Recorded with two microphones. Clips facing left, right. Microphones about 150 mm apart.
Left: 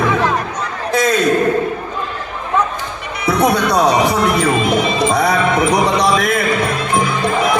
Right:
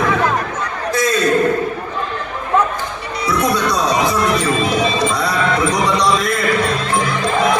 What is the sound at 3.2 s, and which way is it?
Music, 60° left (ahead or behind).